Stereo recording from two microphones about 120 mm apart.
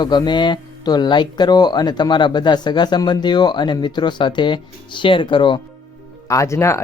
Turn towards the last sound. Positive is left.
turn(degrees=25)  # may be behind; listen again after turning